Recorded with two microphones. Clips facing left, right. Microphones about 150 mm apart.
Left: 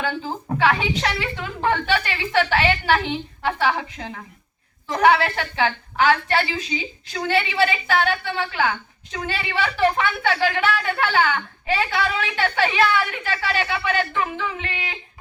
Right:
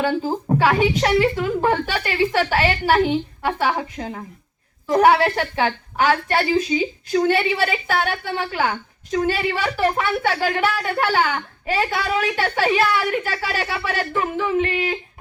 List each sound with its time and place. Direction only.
0.0 s a woman's voice: 40° right (ahead or behind)
0.3 s a woman's voice: 20° right (ahead or behind)
0.6 s a woman's voice: 40° right (ahead or behind)